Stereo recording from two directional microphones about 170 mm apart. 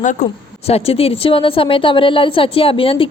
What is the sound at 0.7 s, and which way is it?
A woman's voice, 35° left (ahead or behind).